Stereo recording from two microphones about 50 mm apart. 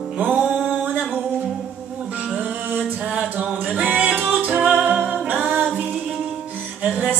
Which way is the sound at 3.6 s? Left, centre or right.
Right.